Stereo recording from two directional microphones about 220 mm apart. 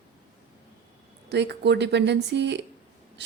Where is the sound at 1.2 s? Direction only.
50° right (ahead or behind).